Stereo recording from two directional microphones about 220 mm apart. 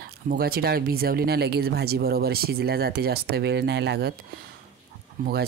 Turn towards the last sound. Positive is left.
turn(degrees=-40)  # may be behind; listen again after turning